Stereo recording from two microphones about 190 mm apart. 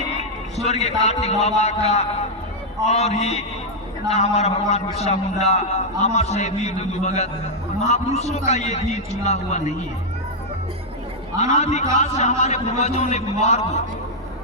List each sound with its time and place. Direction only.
0.2 s a man's voice: 35° left (ahead or behind)
11.3 s a man's voice: 35° left (ahead or behind)